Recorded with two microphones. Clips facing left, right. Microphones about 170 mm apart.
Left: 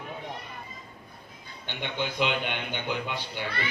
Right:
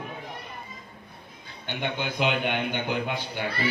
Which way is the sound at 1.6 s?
50° right (ahead or behind).